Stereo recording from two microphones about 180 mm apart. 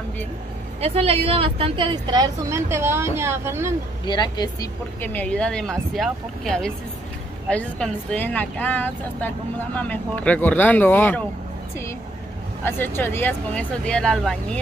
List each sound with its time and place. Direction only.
0.7 s a woman's voice: 35° right (ahead or behind); by 3.7 s 15° right (ahead or behind)
4.0 s speech: 25° left (ahead or behind)
5.0 s speech: 10° left (ahead or behind)
12.6 s speech: 15° left (ahead or behind)